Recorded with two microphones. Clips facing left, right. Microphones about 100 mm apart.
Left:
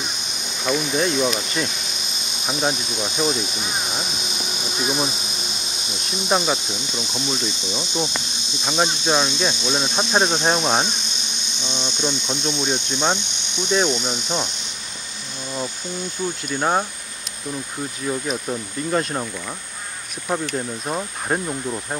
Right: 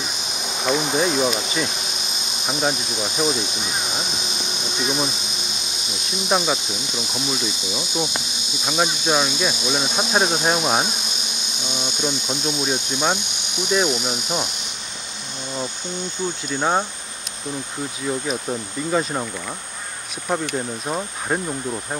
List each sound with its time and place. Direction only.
0.7 s speech: 40° right (ahead or behind)
1.0 s speech: 5° right (ahead or behind)
4.6 s insect: centre (ahead or behind)
6.2 s speech: centre (ahead or behind)
11.6 s insect: 10° right (ahead or behind)
16.5 s speech: 5° left (ahead or behind)
18.5 s speech: 5° right (ahead or behind)
20.2 s speech: 5° right (ahead or behind)